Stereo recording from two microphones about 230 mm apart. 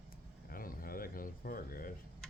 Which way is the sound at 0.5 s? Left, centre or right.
Left.